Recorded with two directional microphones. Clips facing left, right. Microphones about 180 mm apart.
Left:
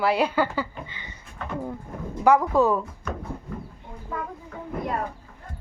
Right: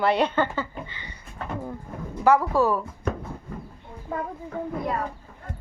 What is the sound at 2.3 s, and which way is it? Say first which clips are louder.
Speech: left 1 dB; 15° left (ahead or behind).